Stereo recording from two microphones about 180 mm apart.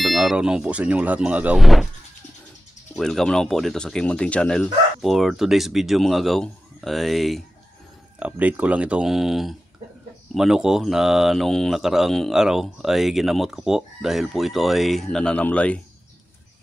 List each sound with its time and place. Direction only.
0.0 s speech: centre (ahead or behind)
3.0 s speech: 5° left (ahead or behind)